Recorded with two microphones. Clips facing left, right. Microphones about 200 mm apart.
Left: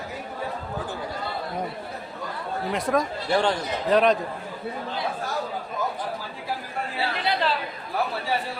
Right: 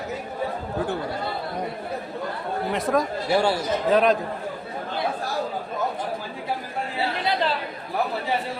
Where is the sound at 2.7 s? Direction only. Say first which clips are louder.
Right 1 dB; centre (ahead or behind).